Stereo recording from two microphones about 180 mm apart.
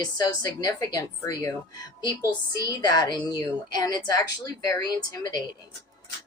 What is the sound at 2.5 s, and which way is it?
A woman's voice, 20° left (ahead or behind).